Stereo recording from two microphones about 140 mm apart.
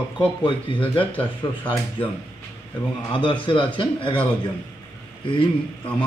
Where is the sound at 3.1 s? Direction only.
40° left (ahead or behind).